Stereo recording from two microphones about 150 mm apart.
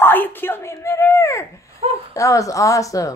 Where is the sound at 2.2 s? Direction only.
20° left (ahead or behind).